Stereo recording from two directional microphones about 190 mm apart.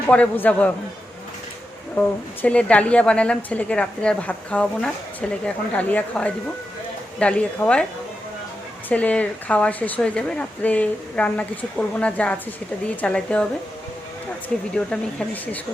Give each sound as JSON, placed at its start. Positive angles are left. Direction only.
{"t": 0.1, "sound": "a woman's voice", "side_deg": 10}
{"t": 2.0, "sound": "a woman's voice", "side_deg": 5}
{"t": 8.9, "sound": "a woman's voice", "side_deg": 5}
{"t": 14.8, "sound": "speech", "side_deg": 5}